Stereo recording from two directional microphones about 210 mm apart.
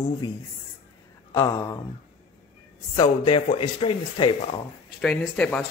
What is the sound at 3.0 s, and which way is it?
Speech, 25° left (ahead or behind).